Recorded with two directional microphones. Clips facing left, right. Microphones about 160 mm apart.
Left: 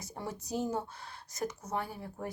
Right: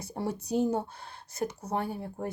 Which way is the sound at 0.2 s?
35° right (ahead or behind).